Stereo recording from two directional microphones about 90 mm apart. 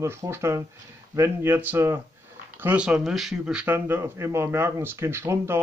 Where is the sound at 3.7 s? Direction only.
25° right (ahead or behind).